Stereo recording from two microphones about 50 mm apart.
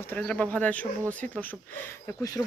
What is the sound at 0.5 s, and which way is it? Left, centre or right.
Speech, left.